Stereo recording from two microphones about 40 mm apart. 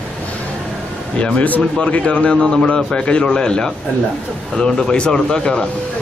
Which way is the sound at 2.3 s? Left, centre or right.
Centre.